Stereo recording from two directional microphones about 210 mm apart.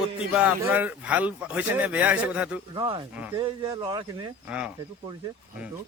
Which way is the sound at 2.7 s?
20° right (ahead or behind).